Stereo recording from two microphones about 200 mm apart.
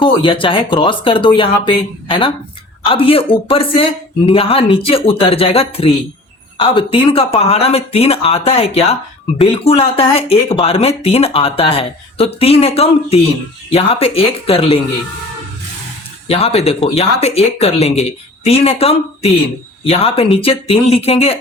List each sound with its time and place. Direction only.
0.0 s speech: 25° left (ahead or behind)
16.2 s speech: 30° left (ahead or behind)